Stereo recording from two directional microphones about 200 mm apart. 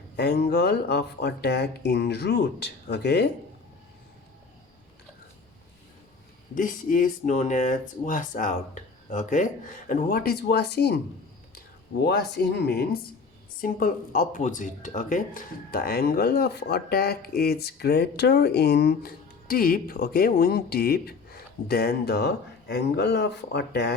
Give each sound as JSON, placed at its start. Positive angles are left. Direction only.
{"t": 0.2, "sound": "speech", "side_deg": 55}
{"t": 6.5, "sound": "speech", "side_deg": 40}
{"t": 12.0, "sound": "speech", "side_deg": 55}